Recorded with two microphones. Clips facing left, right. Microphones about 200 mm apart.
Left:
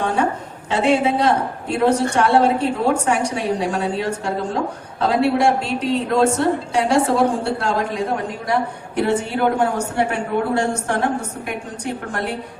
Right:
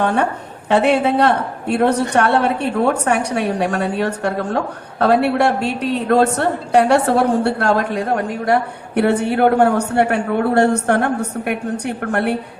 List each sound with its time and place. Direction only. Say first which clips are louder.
0.0 s a woman's voice: right 2 dB; 65° right (ahead or behind)